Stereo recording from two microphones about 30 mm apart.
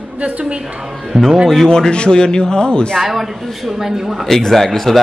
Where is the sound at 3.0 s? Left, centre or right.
Centre.